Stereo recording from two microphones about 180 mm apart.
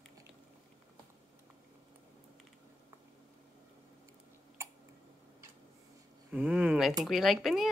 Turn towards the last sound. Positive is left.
turn(degrees=0)  # may be behind; listen again after turning